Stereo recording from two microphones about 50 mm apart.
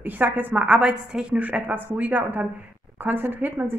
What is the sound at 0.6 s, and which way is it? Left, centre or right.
Speech, right.